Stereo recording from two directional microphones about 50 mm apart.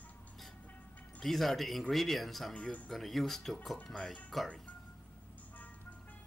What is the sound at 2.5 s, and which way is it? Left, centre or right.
Speech, left.